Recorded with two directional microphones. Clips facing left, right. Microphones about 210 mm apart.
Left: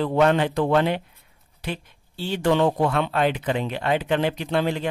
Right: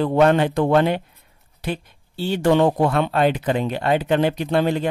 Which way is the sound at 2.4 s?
50° right (ahead or behind).